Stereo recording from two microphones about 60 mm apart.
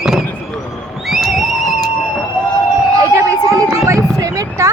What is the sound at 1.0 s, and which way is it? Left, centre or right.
Music, centre.